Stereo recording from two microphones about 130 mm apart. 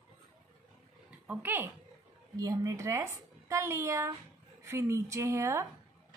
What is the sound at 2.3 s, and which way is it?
A woman's voice, 30° right (ahead or behind).